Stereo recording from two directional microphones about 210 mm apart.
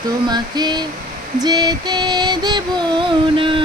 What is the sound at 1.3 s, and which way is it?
Music, 20° right (ahead or behind).